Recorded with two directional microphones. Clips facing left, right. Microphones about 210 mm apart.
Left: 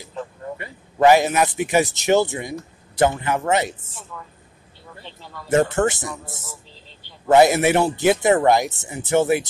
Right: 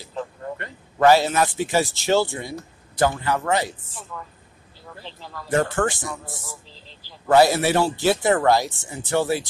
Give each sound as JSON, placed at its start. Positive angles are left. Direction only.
{"t": 0.1, "sound": "a man's voice", "side_deg": 10}
{"t": 5.0, "sound": "speech", "side_deg": 0}
{"t": 5.5, "sound": "a man's voice", "side_deg": 20}
{"t": 6.7, "sound": "a sound", "side_deg": 0}
{"t": 7.2, "sound": "a man's voice", "side_deg": 20}